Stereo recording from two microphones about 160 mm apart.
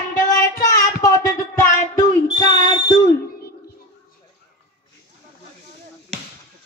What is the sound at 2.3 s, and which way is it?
Smoke detector, 30° left (ahead or behind).